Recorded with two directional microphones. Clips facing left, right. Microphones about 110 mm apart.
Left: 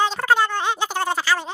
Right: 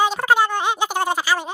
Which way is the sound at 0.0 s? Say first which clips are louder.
Right 2 dB; 15° right (ahead or behind).